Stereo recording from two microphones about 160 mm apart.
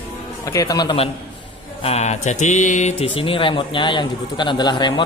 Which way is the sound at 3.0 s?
35° left (ahead or behind).